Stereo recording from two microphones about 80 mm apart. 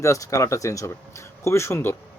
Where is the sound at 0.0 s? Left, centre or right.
Left.